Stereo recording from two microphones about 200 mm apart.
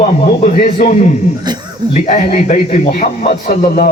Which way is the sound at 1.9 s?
35° left (ahead or behind).